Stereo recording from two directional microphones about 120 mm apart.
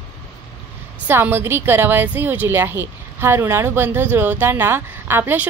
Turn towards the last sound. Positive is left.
turn(degrees=-15)  # may be behind; listen again after turning